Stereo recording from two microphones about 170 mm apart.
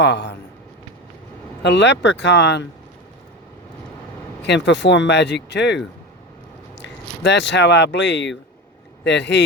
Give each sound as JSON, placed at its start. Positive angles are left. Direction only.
{"t": 0.0, "sound": "speech", "side_deg": 90}
{"t": 1.6, "sound": "speech", "side_deg": 90}
{"t": 4.4, "sound": "speech", "side_deg": 90}